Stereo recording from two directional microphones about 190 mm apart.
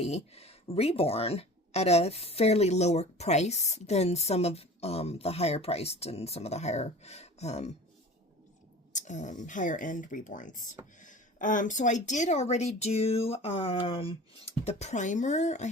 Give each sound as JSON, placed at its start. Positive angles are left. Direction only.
{"t": 0.0, "sound": "speech", "side_deg": 35}
{"t": 8.9, "sound": "speech", "side_deg": 40}